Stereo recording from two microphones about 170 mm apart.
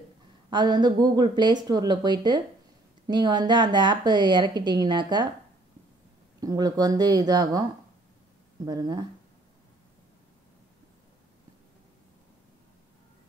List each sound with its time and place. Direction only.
0.5 s a woman's voice: 25° right (ahead or behind)
6.4 s a woman's voice: 20° right (ahead or behind)
8.6 s a woman's voice: 25° right (ahead or behind)